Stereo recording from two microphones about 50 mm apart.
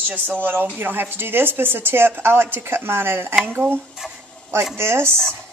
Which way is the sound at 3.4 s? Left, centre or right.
Right.